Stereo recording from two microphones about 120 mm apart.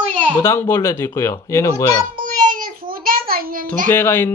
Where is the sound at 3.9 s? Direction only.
20° left (ahead or behind).